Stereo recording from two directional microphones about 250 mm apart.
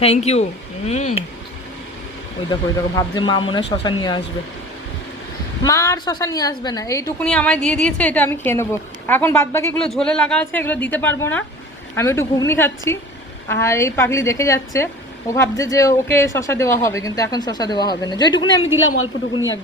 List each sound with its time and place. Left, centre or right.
0.0 s speech: left
2.5 s speech: centre
5.6 s a woman's voice: centre
18.7 s a woman's voice: left